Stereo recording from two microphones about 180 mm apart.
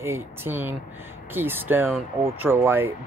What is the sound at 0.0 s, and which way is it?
Speech, 15° right (ahead or behind).